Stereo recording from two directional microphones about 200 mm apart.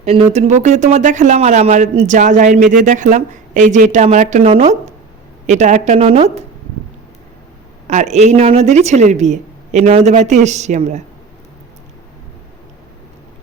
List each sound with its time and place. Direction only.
0.0 s speech: 30° right (ahead or behind)
7.9 s speech: 35° right (ahead or behind)